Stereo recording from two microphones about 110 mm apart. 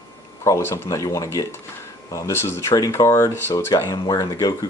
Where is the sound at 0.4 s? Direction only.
25° left (ahead or behind).